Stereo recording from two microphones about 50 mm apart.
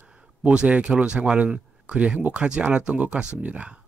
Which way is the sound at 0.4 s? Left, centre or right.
Right.